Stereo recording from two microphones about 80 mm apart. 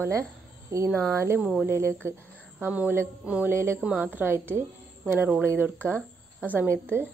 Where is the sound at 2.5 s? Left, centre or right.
Centre.